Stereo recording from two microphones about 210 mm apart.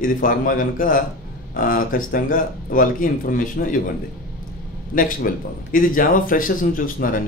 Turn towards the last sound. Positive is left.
turn(degrees=40)  # may be behind; listen again after turning